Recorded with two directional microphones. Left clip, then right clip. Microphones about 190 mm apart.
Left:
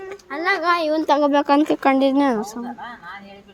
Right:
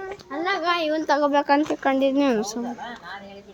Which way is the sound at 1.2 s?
40° left (ahead or behind).